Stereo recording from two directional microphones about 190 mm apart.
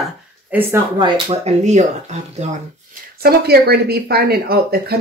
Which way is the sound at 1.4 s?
35° right (ahead or behind).